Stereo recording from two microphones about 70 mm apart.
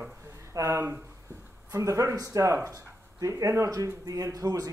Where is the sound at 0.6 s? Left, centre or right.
Right.